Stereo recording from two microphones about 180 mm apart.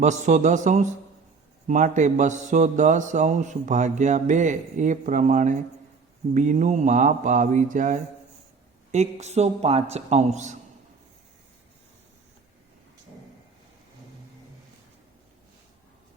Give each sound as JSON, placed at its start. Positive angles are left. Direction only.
{"t": 0.0, "sound": "mantra", "side_deg": -40}
{"t": 8.9, "sound": "speech", "side_deg": -40}